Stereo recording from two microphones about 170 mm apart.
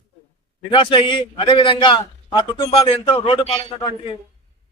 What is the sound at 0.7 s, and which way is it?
A man's voice, 30° left (ahead or behind).